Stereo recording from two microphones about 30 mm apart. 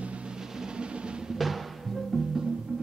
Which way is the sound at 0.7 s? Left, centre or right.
Right.